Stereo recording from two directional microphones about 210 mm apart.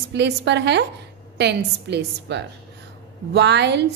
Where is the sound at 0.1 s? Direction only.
55° right (ahead or behind).